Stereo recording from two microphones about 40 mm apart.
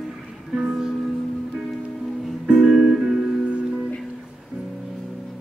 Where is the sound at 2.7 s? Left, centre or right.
Centre.